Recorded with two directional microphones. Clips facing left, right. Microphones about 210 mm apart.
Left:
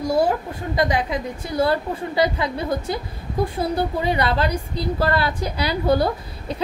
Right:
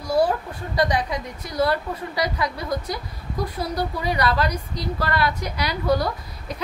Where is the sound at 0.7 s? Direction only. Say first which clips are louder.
Left 1 dB; 25° left (ahead or behind).